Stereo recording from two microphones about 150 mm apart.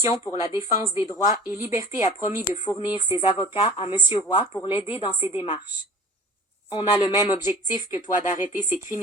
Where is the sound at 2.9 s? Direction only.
30° left (ahead or behind).